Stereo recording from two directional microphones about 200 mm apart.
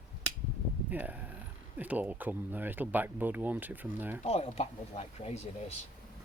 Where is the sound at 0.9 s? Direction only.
10° right (ahead or behind).